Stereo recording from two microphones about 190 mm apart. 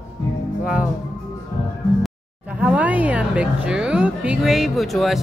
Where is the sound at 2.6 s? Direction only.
5° right (ahead or behind).